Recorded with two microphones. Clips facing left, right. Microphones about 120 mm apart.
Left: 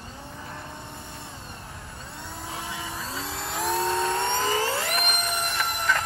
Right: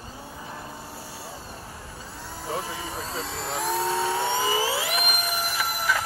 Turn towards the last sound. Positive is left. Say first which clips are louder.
# even
turn(degrees=-5)  # may be behind; listen again after turning